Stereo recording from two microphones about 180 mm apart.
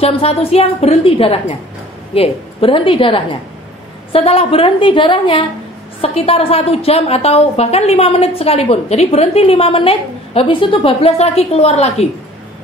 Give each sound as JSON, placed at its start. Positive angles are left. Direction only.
{"t": 0.0, "sound": "a woman's voice", "side_deg": 35}